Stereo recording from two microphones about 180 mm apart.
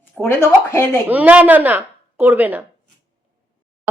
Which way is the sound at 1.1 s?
10° right (ahead or behind).